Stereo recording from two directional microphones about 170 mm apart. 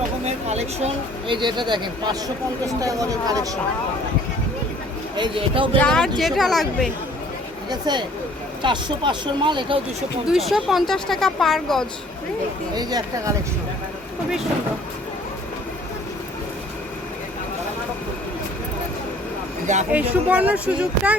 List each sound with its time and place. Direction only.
0.3 s speech: 40° right (ahead or behind)
1.3 s speech: 25° right (ahead or behind)
5.1 s speech: 30° right (ahead or behind)
5.7 s speech: 5° left (ahead or behind)
7.7 s speech: 25° right (ahead or behind)
10.2 s speech: centre (ahead or behind)
12.7 s speech: 25° right (ahead or behind)
19.9 s speech: 10° right (ahead or behind)